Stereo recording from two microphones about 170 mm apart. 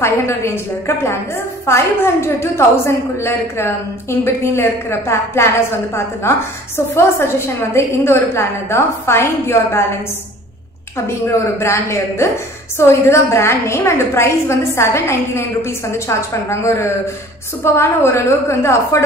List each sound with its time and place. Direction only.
0.0 s a woman's voice: 15° left (ahead or behind)
11.1 s a woman's voice: 15° left (ahead or behind)